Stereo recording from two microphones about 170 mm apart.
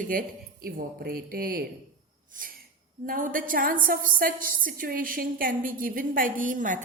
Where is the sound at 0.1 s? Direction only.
55° right (ahead or behind).